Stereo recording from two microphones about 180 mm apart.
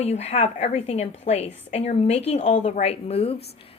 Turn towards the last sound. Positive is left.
turn(degrees=35)  # may be behind; listen again after turning